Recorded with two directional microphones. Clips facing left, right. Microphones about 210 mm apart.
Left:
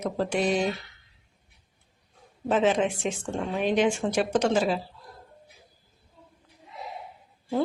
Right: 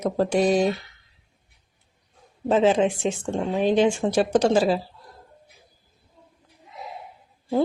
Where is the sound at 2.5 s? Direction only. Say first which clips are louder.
Right 4 dB; 30° right (ahead or behind).